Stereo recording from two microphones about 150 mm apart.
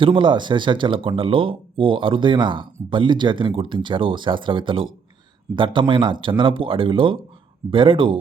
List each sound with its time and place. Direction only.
0.0 s speech: 35° right (ahead or behind)